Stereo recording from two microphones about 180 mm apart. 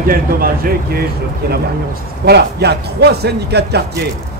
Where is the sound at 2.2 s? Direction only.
65° right (ahead or behind).